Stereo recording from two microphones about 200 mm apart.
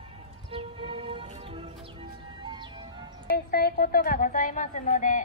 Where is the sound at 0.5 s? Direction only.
25° right (ahead or behind).